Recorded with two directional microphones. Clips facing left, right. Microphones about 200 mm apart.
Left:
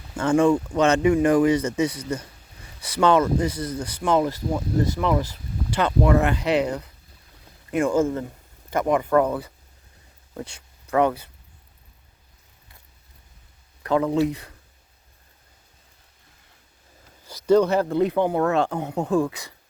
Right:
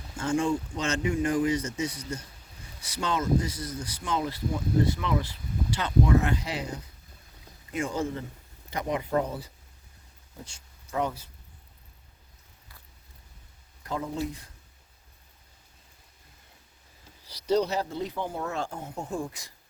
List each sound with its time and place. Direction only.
0.2 s speech: 60° left (ahead or behind); by 2.2 s 75° left (ahead or behind)
2.8 s speech: 60° left (ahead or behind); by 5.8 s 45° left (ahead or behind)
5.8 s speech: 65° left (ahead or behind)
7.7 s speech: 55° left (ahead or behind)
13.8 s speech: 75° left (ahead or behind)
17.2 s speech: 50° left (ahead or behind); by 19.5 s 65° left (ahead or behind)